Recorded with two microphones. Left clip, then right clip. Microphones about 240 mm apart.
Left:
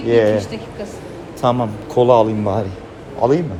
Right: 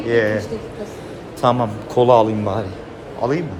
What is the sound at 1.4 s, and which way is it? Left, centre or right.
A man's voice, centre.